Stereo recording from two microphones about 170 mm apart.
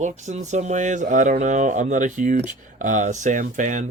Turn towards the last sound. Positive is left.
turn(degrees=-50)  # may be behind; listen again after turning